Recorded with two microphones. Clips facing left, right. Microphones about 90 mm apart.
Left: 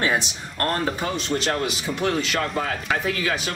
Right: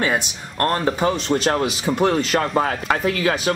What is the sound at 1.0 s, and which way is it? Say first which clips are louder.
Speech: right 6 dB; 35° right (ahead or behind).